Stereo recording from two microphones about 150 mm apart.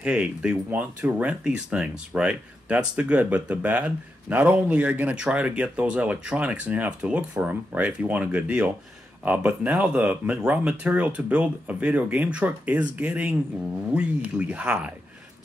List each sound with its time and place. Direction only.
0.0 s speech: 5° right (ahead or behind)